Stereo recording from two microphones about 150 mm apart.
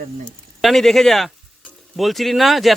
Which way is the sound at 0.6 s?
Centre (ahead or behind).